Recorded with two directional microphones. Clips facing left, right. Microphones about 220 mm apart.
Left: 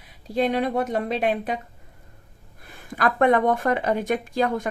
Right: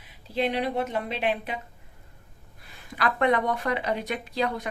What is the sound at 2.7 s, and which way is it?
Speech, 50° left (ahead or behind).